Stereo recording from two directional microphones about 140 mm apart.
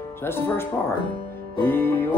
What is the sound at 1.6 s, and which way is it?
Speech, 15° left (ahead or behind).